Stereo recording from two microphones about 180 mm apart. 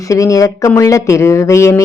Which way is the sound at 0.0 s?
20° left (ahead or behind).